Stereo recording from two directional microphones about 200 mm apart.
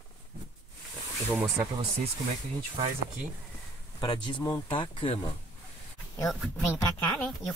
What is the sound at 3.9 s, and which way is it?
Speech, 20° left (ahead or behind).